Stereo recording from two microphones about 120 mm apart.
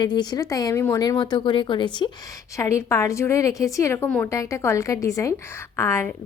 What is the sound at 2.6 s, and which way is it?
A woman's voice, 25° left (ahead or behind).